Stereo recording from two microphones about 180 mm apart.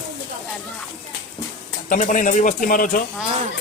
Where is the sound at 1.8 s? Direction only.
45° left (ahead or behind).